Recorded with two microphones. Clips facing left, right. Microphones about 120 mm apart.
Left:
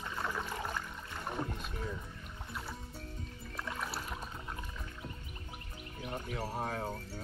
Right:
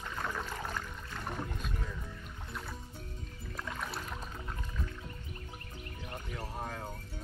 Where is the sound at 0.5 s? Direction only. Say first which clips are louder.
Even; 15° left (ahead or behind).